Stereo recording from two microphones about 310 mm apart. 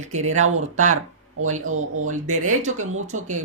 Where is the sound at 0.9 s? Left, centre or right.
Right.